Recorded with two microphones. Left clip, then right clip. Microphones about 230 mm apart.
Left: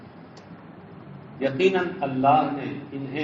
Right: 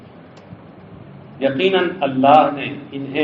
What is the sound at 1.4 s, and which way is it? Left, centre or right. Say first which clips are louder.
A man's voice: right 6 dB; right.